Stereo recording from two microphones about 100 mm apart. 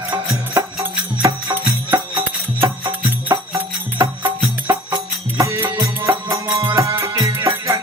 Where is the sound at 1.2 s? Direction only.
50° right (ahead or behind).